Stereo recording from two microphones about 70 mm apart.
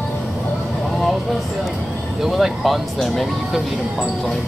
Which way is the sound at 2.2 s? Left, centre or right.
Centre.